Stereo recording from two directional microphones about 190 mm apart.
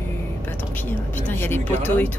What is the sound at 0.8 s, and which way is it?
Speech, 10° left (ahead or behind).